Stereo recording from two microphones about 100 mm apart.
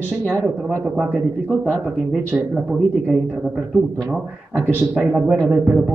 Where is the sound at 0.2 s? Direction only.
5° left (ahead or behind).